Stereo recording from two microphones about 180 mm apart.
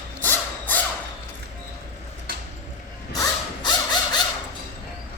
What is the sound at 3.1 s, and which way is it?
Mechanisms, 20° left (ahead or behind).